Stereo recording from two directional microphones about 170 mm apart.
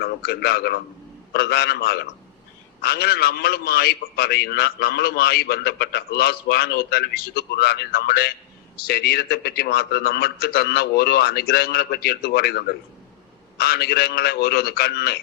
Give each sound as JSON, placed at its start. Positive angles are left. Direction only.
{"t": 0.0, "sound": "a man's voice", "side_deg": 70}